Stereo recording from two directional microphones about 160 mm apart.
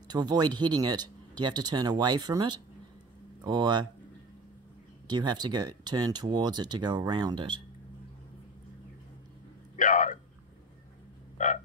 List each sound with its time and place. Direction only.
0.1 s speech: 25° right (ahead or behind)
5.0 s speech: 25° right (ahead or behind)
9.8 s speech: 50° left (ahead or behind)
11.3 s a sound: 50° left (ahead or behind)